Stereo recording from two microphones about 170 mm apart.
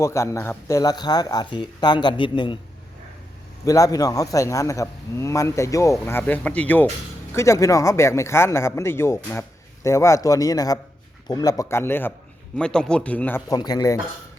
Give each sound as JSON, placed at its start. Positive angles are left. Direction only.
{"t": 0.0, "sound": "speech", "side_deg": 15}
{"t": 3.6, "sound": "speech", "side_deg": 20}
{"t": 13.5, "sound": "speech", "side_deg": 20}